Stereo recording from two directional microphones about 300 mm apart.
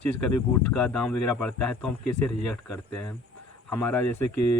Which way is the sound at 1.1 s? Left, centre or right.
Left.